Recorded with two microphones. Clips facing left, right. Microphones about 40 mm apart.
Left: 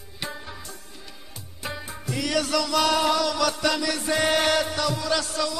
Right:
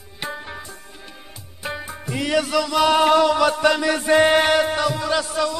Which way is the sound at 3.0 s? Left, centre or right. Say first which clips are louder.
Right 7 dB; right.